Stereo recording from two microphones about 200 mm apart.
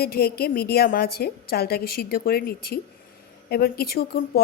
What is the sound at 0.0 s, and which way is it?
A woman's voice, 50° left (ahead or behind).